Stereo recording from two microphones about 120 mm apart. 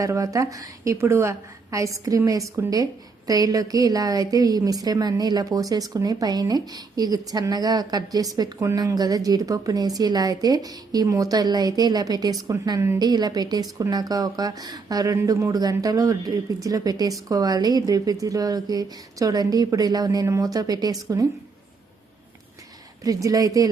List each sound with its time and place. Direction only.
0.0 s a woman's voice: 30° right (ahead or behind)
23.0 s a woman's voice: 30° right (ahead or behind)